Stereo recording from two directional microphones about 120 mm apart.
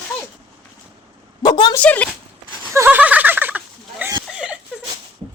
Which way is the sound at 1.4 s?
35° left (ahead or behind).